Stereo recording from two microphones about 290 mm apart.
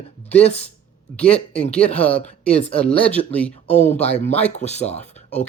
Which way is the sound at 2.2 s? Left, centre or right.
Left.